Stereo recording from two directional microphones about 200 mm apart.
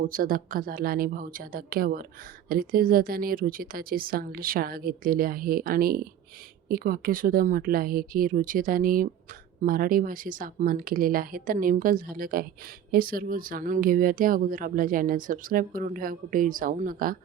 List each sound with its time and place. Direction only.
0.0 s speech: 45° right (ahead or behind)